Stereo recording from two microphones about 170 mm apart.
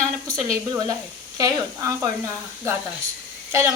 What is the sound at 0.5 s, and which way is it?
Speech, 20° right (ahead or behind).